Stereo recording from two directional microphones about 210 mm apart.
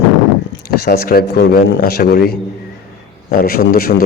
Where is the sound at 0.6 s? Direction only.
45° left (ahead or behind).